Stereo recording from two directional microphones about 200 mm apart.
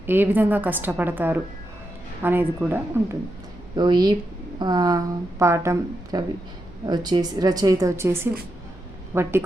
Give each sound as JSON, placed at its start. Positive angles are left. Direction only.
{"t": 0.0, "sound": "a woman's voice", "side_deg": -10}
{"t": 3.8, "sound": "a woman's voice", "side_deg": -20}